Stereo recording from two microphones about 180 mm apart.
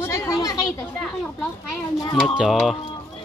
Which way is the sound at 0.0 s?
15° left (ahead or behind).